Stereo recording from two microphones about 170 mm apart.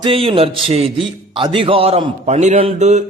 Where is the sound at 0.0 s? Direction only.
30° right (ahead or behind).